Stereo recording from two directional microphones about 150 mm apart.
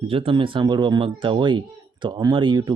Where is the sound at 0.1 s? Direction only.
35° right (ahead or behind).